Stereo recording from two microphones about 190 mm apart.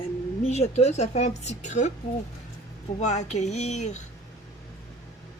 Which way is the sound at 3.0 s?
35° left (ahead or behind).